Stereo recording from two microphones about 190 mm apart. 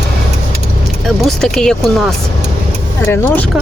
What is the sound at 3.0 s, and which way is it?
Speech, 10° left (ahead or behind).